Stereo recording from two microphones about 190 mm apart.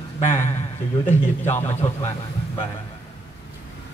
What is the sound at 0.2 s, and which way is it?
Speech, 40° left (ahead or behind).